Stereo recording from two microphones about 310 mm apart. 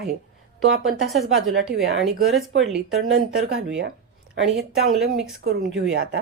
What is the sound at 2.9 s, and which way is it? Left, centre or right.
Speech, right.